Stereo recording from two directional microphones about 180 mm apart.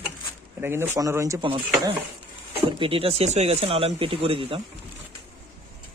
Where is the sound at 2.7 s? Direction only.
30° right (ahead or behind).